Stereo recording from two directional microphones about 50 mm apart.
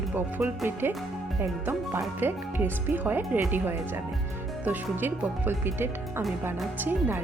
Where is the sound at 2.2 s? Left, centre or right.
Right.